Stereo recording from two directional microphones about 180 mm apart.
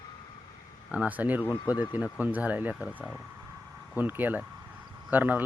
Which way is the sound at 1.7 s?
20° left (ahead or behind).